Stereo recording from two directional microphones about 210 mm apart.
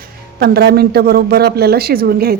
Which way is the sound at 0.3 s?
50° right (ahead or behind).